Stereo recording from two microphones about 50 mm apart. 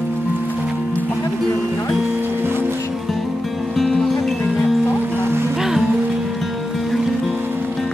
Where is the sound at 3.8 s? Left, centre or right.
Centre.